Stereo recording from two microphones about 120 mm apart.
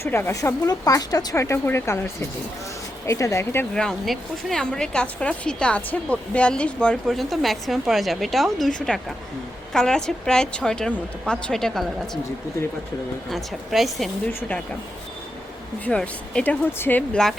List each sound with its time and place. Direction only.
0.0 s speech: 20° left (ahead or behind)
3.1 s speech: 25° left (ahead or behind)
3.8 s speech: 5° left (ahead or behind)
13.3 s speech: centre (ahead or behind)
14.3 s speech: 10° left (ahead or behind)
15.8 s speech: 10° left (ahead or behind)
17.2 s speech: 5° left (ahead or behind)